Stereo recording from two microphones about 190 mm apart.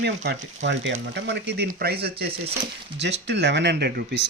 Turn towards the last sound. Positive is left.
turn(degrees=-60)  # may be behind; listen again after turning